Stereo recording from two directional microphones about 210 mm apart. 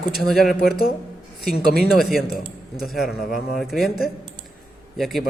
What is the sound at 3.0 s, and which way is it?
Speech, 45° left (ahead or behind).